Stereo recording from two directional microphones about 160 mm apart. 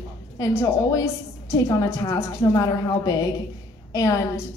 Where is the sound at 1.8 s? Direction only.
20° left (ahead or behind).